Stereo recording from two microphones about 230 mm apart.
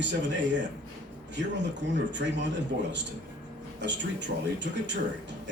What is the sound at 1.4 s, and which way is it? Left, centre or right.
Speech, right.